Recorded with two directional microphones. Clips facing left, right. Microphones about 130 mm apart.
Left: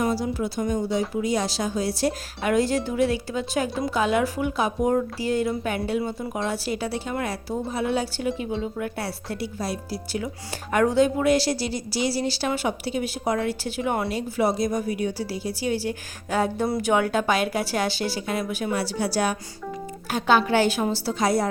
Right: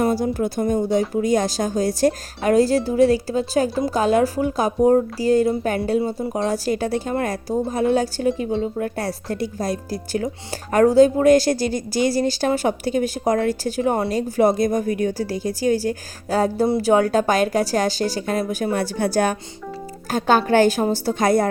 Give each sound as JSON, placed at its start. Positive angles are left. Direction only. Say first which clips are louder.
{"t": 0.0, "sound": "a woman's voice", "louder": "right 5 dB", "side_deg": -50}